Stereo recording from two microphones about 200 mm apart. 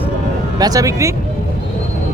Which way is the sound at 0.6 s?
15° right (ahead or behind).